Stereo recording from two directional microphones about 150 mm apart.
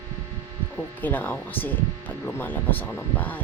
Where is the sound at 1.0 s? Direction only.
10° left (ahead or behind).